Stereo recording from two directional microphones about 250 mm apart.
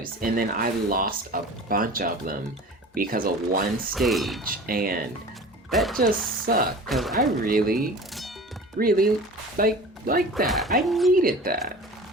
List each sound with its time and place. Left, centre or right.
0.0 s speech: right
3.9 s speech: centre
4.6 s speech: right
5.7 s speech: centre
6.0 s speech: right
6.8 s speech: centre
7.4 s speech: right
10.3 s speech: centre
11.1 s speech: right